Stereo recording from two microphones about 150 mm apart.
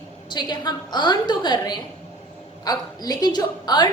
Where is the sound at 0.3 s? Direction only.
30° left (ahead or behind).